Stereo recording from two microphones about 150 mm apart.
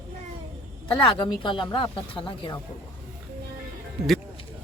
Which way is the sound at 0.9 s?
35° left (ahead or behind).